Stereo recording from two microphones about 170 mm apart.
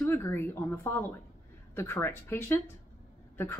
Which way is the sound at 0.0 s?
15° left (ahead or behind).